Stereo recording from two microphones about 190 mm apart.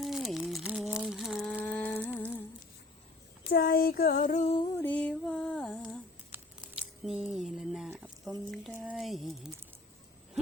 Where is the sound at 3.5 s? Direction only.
50° left (ahead or behind).